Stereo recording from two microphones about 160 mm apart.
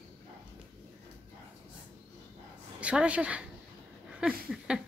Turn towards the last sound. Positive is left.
turn(degrees=-5)  # may be behind; listen again after turning